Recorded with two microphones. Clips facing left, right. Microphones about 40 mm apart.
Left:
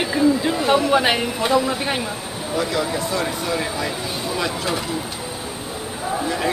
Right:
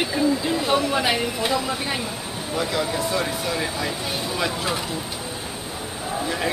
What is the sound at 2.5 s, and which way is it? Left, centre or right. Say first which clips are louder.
Speech: left 2 dB; centre.